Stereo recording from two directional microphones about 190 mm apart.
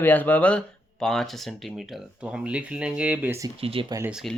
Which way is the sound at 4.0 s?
5° right (ahead or behind).